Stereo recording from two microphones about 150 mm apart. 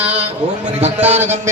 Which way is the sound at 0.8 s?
45° right (ahead or behind).